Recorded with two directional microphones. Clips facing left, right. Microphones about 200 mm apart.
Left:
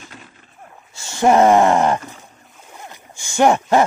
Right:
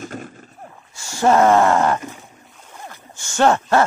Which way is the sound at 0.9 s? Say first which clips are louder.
Left 2 dB; 20° left (ahead or behind).